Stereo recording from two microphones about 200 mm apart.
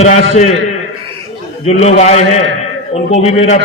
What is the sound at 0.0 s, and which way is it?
Speech, 35° left (ahead or behind).